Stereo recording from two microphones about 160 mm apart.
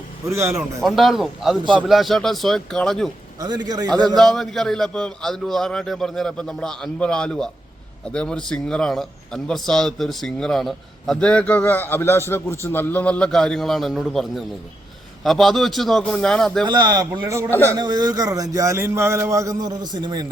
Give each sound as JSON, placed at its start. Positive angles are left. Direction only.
{"t": 0.5, "sound": "speech", "side_deg": 0}
{"t": 3.4, "sound": "a man's voice", "side_deg": -25}
{"t": 4.2, "sound": "speech", "side_deg": 0}
{"t": 16.6, "sound": "a man's voice", "side_deg": -25}